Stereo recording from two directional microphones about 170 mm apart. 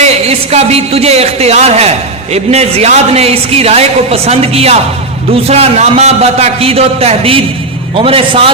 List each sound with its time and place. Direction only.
0.0 s a woman's voice: 35° right (ahead or behind)